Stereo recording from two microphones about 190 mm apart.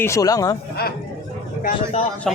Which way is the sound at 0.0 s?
15° left (ahead or behind).